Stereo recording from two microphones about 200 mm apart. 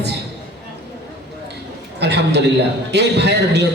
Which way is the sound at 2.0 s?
55° right (ahead or behind).